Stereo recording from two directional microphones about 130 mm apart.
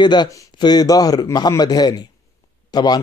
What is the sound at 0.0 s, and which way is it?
A man's voice, 35° left (ahead or behind).